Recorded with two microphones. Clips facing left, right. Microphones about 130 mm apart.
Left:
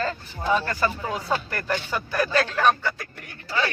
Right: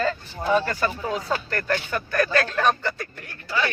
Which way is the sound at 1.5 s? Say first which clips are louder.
Right 2 dB; 5° left (ahead or behind).